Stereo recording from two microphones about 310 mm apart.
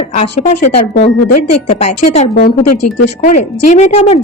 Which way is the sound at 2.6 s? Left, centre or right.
Left.